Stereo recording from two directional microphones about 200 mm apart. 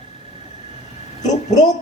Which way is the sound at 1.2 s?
35° left (ahead or behind).